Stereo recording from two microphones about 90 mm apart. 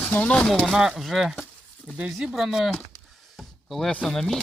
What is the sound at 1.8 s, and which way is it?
Speech, 10° right (ahead or behind).